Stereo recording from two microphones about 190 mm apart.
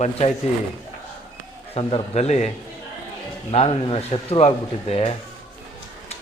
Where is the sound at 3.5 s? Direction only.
30° left (ahead or behind).